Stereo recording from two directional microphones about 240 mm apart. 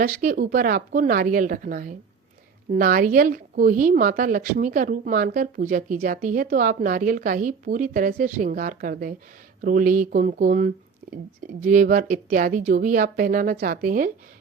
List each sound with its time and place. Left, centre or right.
0.0 s a woman's voice: right